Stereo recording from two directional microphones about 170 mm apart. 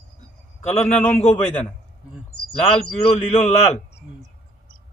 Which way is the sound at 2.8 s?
40° left (ahead or behind).